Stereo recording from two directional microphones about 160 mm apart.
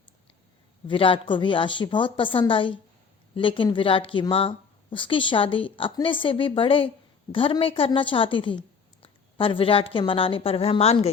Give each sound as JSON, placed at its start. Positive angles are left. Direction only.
{"t": 0.9, "sound": "a woman's voice", "side_deg": 35}